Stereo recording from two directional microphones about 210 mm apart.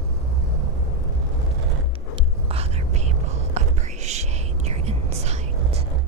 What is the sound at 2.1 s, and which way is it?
Whispering, 30° right (ahead or behind).